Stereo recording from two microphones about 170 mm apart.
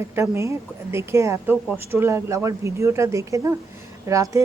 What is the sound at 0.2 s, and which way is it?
Speech, 15° right (ahead or behind).